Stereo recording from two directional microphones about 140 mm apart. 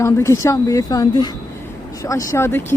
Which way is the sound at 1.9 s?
25° left (ahead or behind).